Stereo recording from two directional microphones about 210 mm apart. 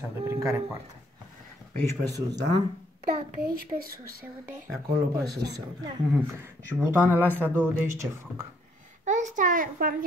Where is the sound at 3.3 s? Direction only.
45° right (ahead or behind).